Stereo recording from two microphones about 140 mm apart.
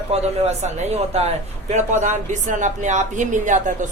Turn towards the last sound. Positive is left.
turn(degrees=-60)  # may be behind; listen again after turning